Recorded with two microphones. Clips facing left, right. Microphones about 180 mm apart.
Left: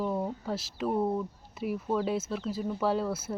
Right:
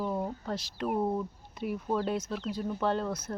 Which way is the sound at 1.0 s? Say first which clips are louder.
Left 1 dB; centre (ahead or behind).